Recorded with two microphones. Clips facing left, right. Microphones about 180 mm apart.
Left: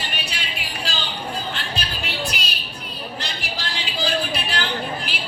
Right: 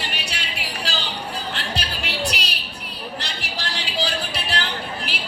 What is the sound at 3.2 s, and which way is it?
Music, 70° right (ahead or behind).